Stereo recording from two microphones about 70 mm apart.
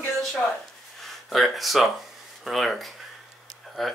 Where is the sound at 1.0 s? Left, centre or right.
Centre.